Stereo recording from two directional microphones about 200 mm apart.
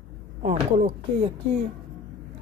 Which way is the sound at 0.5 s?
30° right (ahead or behind).